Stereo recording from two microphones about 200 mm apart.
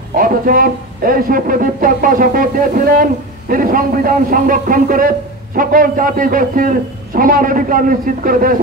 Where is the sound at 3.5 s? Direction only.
45° right (ahead or behind).